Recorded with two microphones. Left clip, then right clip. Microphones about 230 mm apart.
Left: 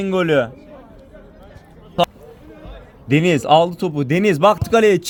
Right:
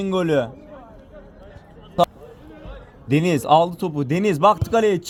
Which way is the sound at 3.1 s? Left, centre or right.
Left.